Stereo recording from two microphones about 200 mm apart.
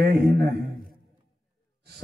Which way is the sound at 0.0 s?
50° right (ahead or behind).